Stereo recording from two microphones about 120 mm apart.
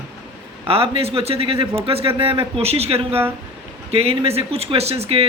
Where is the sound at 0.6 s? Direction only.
50° right (ahead or behind).